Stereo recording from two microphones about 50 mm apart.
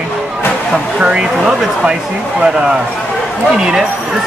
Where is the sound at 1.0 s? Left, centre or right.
Centre.